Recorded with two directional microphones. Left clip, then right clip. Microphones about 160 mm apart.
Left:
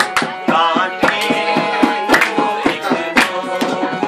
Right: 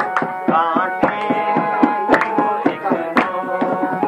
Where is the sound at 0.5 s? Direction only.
20° left (ahead or behind).